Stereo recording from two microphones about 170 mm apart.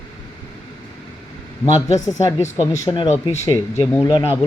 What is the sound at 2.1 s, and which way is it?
Speech, 45° left (ahead or behind).